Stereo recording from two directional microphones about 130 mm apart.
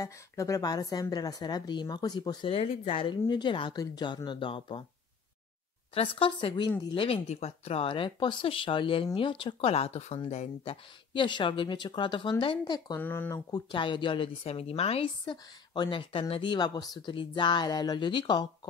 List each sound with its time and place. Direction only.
0.0 s speech: 25° left (ahead or behind)
2.5 s speech: 50° left (ahead or behind)
5.9 s speech: 45° left (ahead or behind)
13.0 s speech: 15° left (ahead or behind)
13.3 s speech: 35° left (ahead or behind)